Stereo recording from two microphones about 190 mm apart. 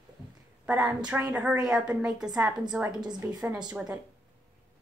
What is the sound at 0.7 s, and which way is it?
A woman's voice, 5° right (ahead or behind).